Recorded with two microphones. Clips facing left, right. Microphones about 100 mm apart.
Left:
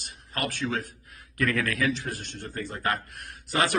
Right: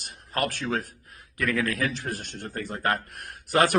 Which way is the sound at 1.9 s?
45° right (ahead or behind).